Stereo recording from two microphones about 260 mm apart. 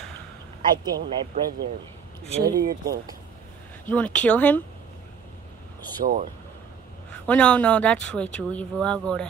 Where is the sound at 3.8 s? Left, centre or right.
Centre.